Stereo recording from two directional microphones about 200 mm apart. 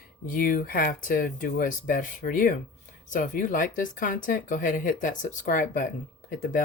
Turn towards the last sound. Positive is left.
turn(degrees=40)  # may be behind; listen again after turning